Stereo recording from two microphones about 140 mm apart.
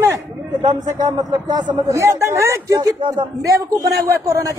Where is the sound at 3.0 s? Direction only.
35° right (ahead or behind).